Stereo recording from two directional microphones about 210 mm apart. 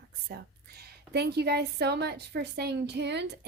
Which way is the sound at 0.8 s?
50° right (ahead or behind).